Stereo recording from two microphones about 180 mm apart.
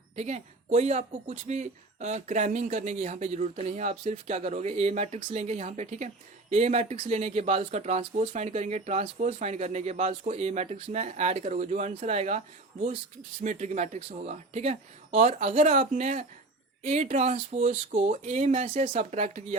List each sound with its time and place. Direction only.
0.2 s speech: 40° right (ahead or behind)
13.4 s speech: 40° right (ahead or behind)